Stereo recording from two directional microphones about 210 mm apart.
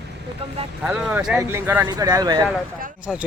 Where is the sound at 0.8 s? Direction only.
5° right (ahead or behind).